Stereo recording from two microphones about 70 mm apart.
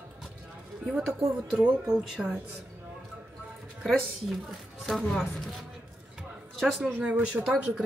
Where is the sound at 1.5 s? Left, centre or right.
Right.